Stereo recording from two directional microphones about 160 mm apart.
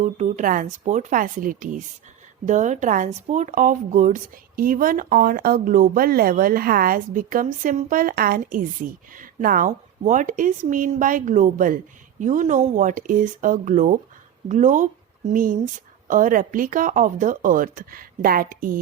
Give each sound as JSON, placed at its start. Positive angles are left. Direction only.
{"t": 0.0, "sound": "speech", "side_deg": -50}